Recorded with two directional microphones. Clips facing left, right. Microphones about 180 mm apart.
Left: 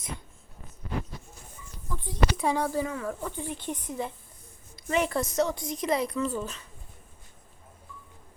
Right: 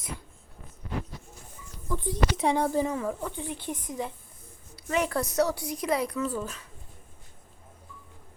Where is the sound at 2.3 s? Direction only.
20° right (ahead or behind).